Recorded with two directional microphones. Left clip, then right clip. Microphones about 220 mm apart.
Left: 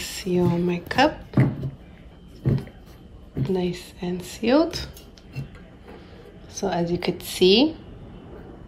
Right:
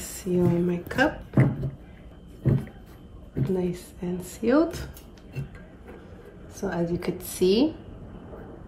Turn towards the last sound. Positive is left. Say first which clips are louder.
# left 5 dB
turn(degrees=5)  # may be behind; listen again after turning